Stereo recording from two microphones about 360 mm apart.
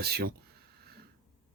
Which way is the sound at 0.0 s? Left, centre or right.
Right.